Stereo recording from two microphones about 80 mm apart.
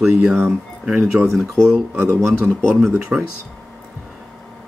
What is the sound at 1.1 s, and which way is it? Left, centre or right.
Speech, centre.